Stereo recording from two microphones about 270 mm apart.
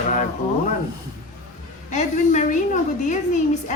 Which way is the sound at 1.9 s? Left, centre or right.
Left.